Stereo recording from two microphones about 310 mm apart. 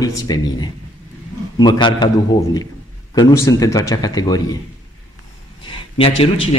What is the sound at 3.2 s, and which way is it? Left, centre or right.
Speech, centre.